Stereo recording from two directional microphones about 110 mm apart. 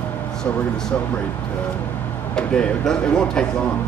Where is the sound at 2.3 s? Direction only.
5° left (ahead or behind).